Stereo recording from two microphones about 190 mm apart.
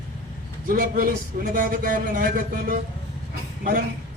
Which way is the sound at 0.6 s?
50° right (ahead or behind).